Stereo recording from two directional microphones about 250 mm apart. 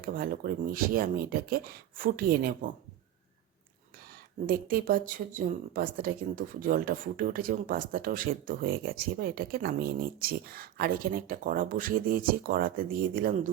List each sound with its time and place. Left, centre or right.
0.0 s a woman's voice: right
4.4 s a woman's voice: right